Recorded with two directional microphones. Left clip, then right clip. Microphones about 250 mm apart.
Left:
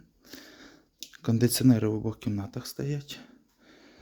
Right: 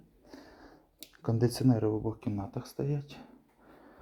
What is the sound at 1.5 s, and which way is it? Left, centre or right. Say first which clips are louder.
Speech: left 4 dB; left.